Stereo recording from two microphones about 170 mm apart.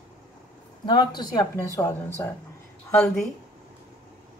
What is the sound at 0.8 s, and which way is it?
A woman's voice, 25° left (ahead or behind).